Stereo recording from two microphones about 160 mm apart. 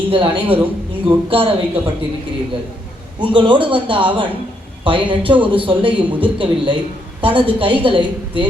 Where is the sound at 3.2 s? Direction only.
30° right (ahead or behind).